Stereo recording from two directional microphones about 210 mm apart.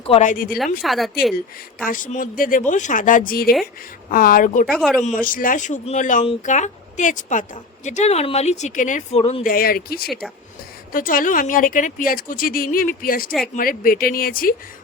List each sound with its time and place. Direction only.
0.0 s speech: 30° left (ahead or behind)
0.5 s speech: centre (ahead or behind)
1.8 s speech: 40° left (ahead or behind)
4.6 s speech: centre (ahead or behind)
5.0 s speech: 40° left (ahead or behind)